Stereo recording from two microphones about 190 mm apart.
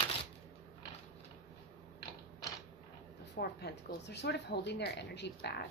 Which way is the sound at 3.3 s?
55° left (ahead or behind).